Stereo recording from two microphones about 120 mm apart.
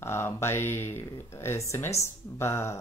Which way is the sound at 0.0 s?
20° left (ahead or behind).